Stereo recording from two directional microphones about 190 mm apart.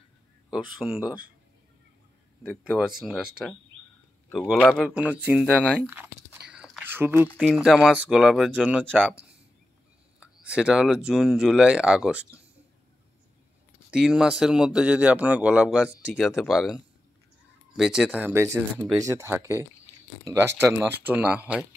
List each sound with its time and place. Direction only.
0.5 s a man's voice: 5° right (ahead or behind)
2.4 s a man's voice: 5° right (ahead or behind)
4.4 s a man's voice: centre (ahead or behind)
10.4 s a man's voice: 5° right (ahead or behind)
13.8 s a man's voice: 5° right (ahead or behind)